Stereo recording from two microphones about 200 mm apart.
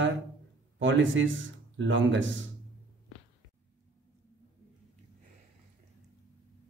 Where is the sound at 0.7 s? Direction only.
70° right (ahead or behind).